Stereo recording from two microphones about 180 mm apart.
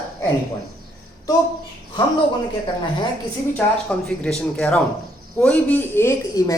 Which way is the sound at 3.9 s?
5° left (ahead or behind).